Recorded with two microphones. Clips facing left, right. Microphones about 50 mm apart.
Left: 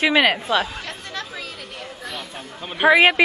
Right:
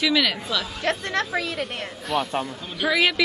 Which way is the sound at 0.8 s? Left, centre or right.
Right.